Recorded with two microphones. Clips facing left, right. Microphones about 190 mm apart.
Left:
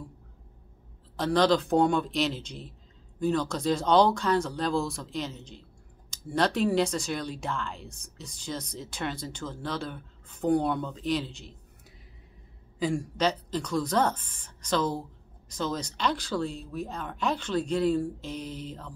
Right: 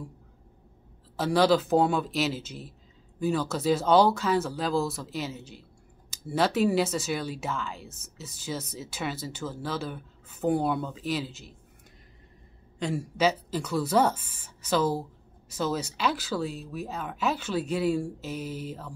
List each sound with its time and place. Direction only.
1.1 s speech: 5° right (ahead or behind)
12.7 s speech: centre (ahead or behind)